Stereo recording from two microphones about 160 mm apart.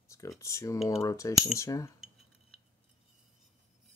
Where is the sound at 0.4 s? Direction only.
20° left (ahead or behind).